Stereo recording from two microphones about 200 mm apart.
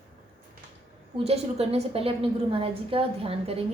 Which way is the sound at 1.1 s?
30° right (ahead or behind).